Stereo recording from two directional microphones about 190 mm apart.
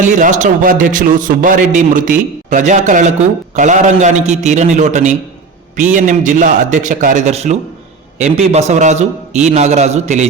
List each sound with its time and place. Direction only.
0.0 s a man's voice: 40° right (ahead or behind)